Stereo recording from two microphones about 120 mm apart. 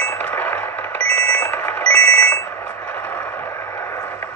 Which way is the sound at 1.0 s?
60° right (ahead or behind).